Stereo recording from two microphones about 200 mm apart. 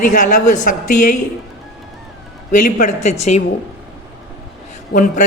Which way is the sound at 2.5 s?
40° left (ahead or behind).